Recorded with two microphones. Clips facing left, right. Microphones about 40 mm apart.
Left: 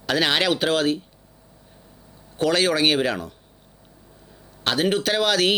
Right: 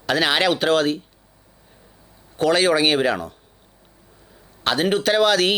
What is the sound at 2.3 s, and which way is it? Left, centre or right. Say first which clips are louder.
Speech: right 3 dB; centre.